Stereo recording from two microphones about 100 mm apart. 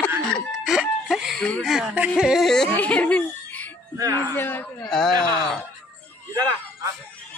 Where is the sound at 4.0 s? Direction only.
35° right (ahead or behind).